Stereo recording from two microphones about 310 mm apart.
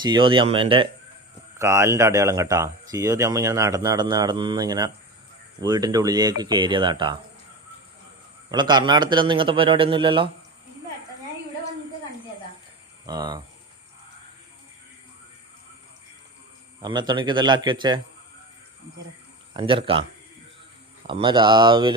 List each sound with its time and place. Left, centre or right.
0.0 s speech: centre
8.4 s speech: centre
13.1 s speech: centre
16.8 s speech: centre
19.5 s speech: centre
21.1 s speech: centre